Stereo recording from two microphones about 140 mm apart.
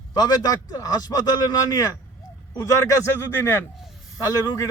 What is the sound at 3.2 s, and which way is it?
A man's voice, 15° left (ahead or behind).